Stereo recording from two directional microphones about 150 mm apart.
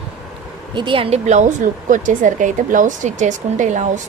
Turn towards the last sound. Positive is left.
turn(degrees=-55)  # may be behind; listen again after turning